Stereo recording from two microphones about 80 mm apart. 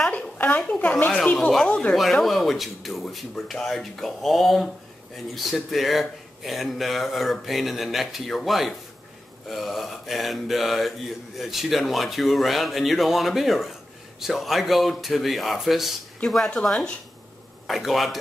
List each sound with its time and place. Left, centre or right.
0.1 s a sound: centre
0.6 s speech: centre
2.1 s speech: centre